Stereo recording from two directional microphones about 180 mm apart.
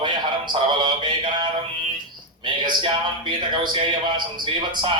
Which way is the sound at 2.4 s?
25° right (ahead or behind).